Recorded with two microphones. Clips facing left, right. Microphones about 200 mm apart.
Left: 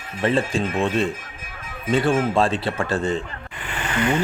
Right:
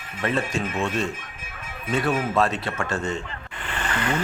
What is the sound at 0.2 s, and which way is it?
Speech, 30° left (ahead or behind).